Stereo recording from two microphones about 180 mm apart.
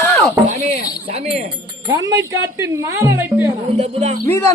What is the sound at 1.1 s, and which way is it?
Chink, 40° right (ahead or behind).